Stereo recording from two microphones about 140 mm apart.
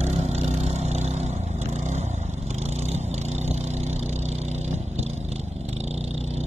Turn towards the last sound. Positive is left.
turn(degrees=-50)  # may be behind; listen again after turning